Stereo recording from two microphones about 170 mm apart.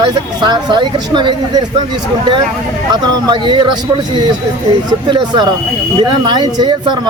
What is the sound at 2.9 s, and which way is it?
Speech, 25° right (ahead or behind).